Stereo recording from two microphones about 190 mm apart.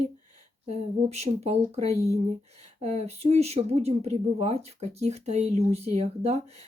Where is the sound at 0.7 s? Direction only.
35° right (ahead or behind).